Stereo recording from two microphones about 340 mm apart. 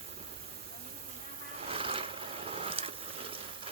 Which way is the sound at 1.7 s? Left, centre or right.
Centre.